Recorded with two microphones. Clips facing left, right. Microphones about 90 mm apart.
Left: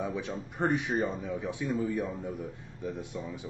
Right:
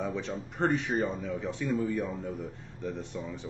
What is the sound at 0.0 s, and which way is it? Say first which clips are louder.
Speech: right 1 dB; 10° left (ahead or behind).